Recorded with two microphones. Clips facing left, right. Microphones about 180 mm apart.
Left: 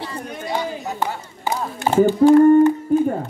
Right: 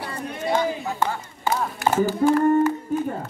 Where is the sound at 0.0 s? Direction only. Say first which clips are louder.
Right 1 dB; 20° left (ahead or behind).